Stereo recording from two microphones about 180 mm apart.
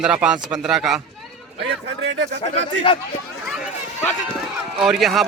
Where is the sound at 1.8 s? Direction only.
75° right (ahead or behind).